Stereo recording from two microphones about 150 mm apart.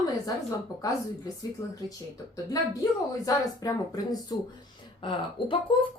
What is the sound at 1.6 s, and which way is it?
Speech, 25° left (ahead or behind).